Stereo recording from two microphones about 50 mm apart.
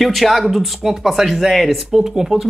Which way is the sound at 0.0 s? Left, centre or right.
Centre.